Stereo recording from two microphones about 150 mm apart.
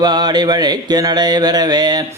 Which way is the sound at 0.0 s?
30° right (ahead or behind).